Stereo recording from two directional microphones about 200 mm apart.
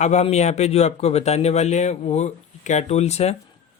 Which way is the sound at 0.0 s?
35° left (ahead or behind).